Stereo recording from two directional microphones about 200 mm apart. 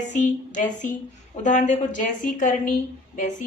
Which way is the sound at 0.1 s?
40° left (ahead or behind).